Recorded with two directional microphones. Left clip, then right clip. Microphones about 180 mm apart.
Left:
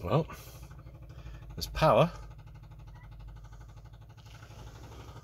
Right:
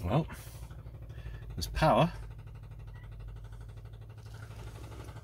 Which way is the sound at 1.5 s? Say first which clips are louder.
Left 2 dB; 40° left (ahead or behind).